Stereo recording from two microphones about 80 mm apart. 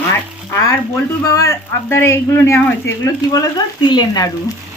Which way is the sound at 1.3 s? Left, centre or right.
Left.